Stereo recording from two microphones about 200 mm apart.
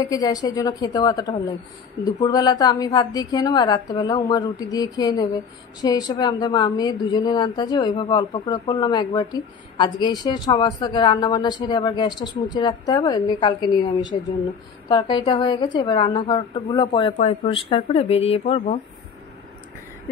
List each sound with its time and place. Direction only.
0.0 s a woman's voice: 20° left (ahead or behind)